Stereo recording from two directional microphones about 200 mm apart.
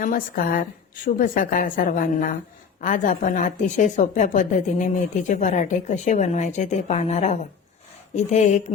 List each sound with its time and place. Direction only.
0.0 s a woman's voice: 45° left (ahead or behind)